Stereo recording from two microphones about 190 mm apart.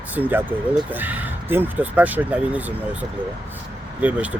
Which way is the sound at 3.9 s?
10° right (ahead or behind).